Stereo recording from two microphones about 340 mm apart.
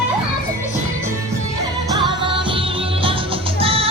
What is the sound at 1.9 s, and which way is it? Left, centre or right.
Music, centre.